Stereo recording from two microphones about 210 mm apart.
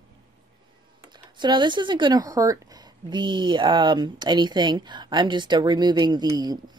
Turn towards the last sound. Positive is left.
turn(degrees=-20)  # may be behind; listen again after turning